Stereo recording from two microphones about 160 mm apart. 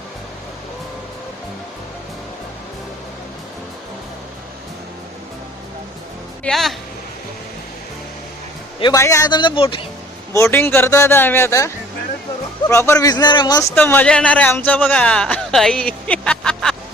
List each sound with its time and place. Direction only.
6.4 s speech: centre (ahead or behind)
8.8 s a man's voice: 20° left (ahead or behind)
10.3 s a man's voice: 15° left (ahead or behind)
13.7 s speech: 10° left (ahead or behind)